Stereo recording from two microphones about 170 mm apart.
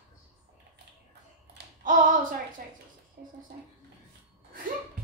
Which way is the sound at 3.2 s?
60° right (ahead or behind).